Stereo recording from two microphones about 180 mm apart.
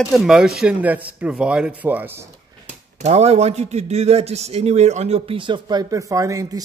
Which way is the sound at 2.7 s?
40° right (ahead or behind).